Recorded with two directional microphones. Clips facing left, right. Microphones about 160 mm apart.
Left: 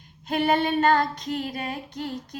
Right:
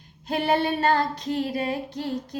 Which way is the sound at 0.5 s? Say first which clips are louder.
Even; 30° right (ahead or behind).